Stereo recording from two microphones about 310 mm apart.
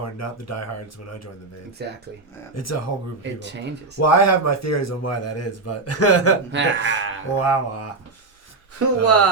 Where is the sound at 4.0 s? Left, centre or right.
Left.